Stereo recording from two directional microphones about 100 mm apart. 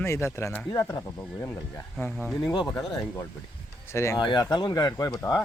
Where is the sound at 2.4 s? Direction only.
45° left (ahead or behind).